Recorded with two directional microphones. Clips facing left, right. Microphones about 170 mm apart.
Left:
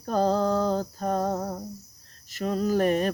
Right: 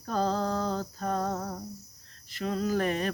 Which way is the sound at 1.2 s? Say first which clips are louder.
Left 5 dB; 25° left (ahead or behind).